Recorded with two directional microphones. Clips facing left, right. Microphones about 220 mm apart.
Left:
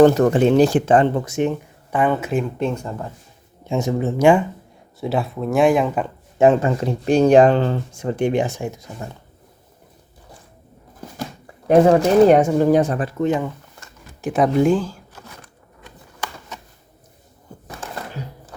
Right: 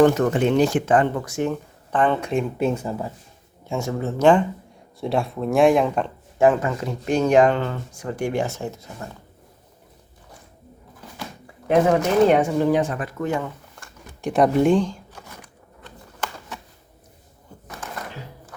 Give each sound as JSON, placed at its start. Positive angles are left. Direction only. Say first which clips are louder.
{"t": 0.0, "sound": "speech", "louder": "left 4 dB", "side_deg": 35}
{"t": 1.9, "sound": "speech", "louder": "left 1 dB", "side_deg": 10}
{"t": 2.6, "sound": "speech", "louder": "right 1 dB", "side_deg": -5}
{"t": 3.7, "sound": "speech", "louder": "left 5 dB", "side_deg": 20}
{"t": 6.4, "sound": "speech", "louder": "left 3 dB", "side_deg": 25}
{"t": 11.0, "sound": "a sound", "louder": "left 6 dB", "side_deg": 45}
{"t": 11.7, "sound": "speech", "louder": "left 5 dB", "side_deg": 35}
{"t": 14.2, "sound": "speech", "louder": "left 1 dB", "side_deg": 0}
{"t": 17.7, "sound": "a sound", "louder": "left 2 dB", "side_deg": 30}